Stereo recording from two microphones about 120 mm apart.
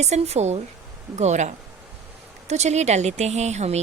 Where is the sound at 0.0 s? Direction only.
65° right (ahead or behind).